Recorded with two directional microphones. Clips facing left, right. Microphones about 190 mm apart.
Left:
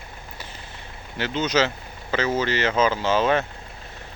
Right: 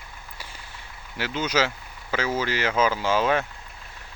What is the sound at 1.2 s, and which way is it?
Speech, 10° right (ahead or behind).